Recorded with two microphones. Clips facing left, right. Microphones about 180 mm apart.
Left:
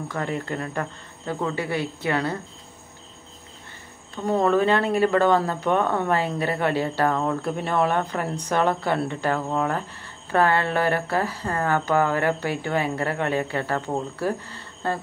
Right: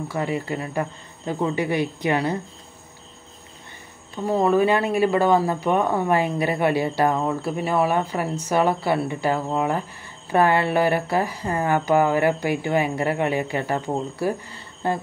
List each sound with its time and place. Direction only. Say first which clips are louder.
0.1 s speech: right 2 dB; 10° right (ahead or behind)
4.3 s speech: right 1 dB; 10° right (ahead or behind)